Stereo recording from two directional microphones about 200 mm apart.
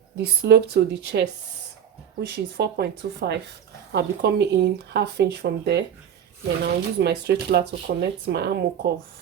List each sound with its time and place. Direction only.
0.2 s speech: 55° right (ahead or behind)